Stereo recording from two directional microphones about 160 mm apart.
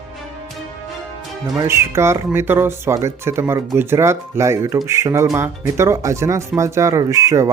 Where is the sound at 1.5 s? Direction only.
20° right (ahead or behind).